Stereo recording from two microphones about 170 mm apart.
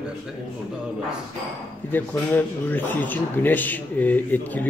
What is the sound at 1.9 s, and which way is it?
Speech, 10° left (ahead or behind).